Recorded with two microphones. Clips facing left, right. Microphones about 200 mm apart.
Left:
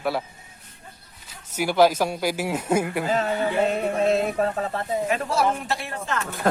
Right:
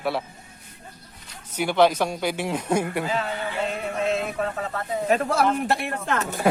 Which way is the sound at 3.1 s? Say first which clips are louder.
Left 4 dB; 40° left (ahead or behind).